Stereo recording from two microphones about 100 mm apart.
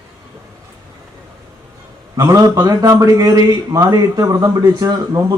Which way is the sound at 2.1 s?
35° right (ahead or behind).